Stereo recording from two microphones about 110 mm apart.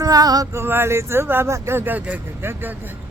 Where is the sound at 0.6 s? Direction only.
20° right (ahead or behind).